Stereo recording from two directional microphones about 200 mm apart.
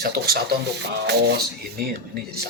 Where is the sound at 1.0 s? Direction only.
55° right (ahead or behind).